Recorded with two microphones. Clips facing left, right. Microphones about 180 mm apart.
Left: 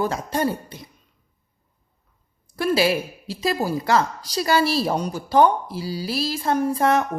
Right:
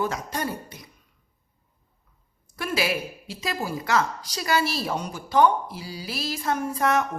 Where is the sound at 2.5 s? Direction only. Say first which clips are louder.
Left 7 dB; 30° left (ahead or behind).